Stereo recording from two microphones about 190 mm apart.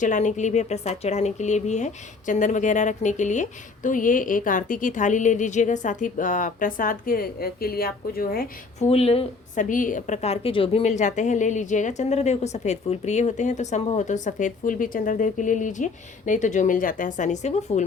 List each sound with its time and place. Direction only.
0.0 s speech: 40° left (ahead or behind)
8.8 s speech: 30° left (ahead or behind)
9.6 s speech: 45° left (ahead or behind)